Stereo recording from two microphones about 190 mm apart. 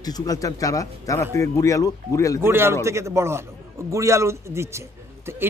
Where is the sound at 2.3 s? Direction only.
10° right (ahead or behind).